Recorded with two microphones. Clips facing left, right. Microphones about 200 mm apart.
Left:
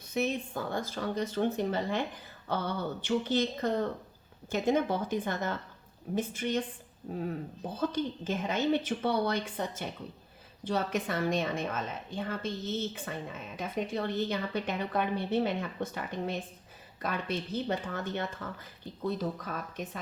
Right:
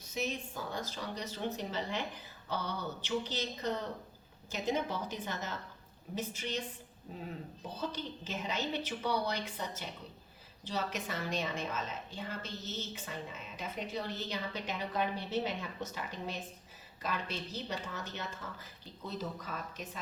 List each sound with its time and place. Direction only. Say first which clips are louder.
0.1 s a woman's voice: left 7 dB; 60° left (ahead or behind)
7.8 s a woman's voice: left 8 dB; 50° left (ahead or behind)